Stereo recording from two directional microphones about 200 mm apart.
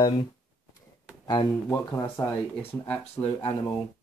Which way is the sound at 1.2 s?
20° left (ahead or behind).